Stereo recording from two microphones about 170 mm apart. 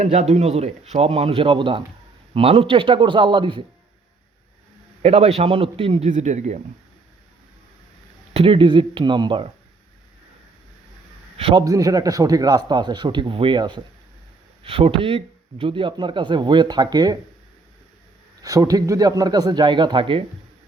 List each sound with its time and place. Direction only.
0.0 s speech: 45° right (ahead or behind)
5.0 s speech: 35° right (ahead or behind)
6.1 s speech: 45° right (ahead or behind)
8.3 s speech: 35° right (ahead or behind)
11.3 s speech: 35° right (ahead or behind)
11.6 s speech: 20° right (ahead or behind)
18.4 s speech: 20° right (ahead or behind)